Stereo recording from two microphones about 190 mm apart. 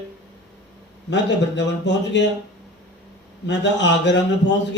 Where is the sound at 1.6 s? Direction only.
65° left (ahead or behind).